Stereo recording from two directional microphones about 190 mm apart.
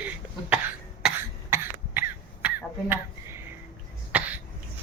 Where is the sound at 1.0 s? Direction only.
5° right (ahead or behind).